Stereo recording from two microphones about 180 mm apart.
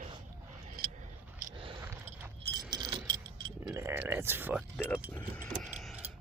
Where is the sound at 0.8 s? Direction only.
55° right (ahead or behind).